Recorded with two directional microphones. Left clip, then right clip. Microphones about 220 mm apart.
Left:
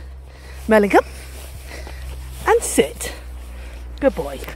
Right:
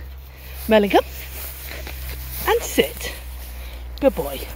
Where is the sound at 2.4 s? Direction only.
20° left (ahead or behind).